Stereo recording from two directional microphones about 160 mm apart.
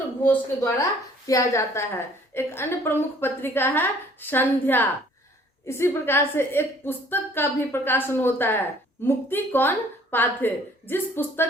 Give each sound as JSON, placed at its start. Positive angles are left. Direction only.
{"t": 0.2, "sound": "a woman's voice", "side_deg": 15}